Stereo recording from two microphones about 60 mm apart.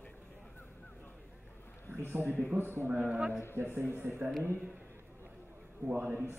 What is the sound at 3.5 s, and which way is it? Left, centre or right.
Speech, right.